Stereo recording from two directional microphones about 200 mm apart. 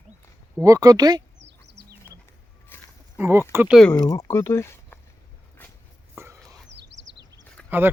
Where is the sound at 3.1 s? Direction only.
10° right (ahead or behind).